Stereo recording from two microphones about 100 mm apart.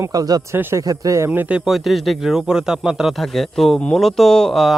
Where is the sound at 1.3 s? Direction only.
15° right (ahead or behind).